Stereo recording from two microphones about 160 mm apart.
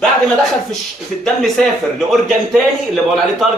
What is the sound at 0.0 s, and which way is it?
A man's voice, centre (ahead or behind).